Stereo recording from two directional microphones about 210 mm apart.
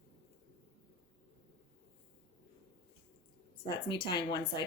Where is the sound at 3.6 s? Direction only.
25° left (ahead or behind).